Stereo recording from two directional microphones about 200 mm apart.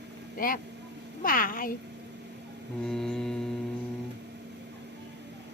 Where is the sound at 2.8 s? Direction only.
Centre (ahead or behind).